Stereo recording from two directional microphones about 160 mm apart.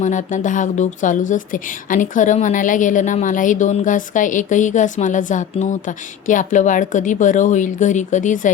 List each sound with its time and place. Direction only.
0.0 s speech: 50° left (ahead or behind)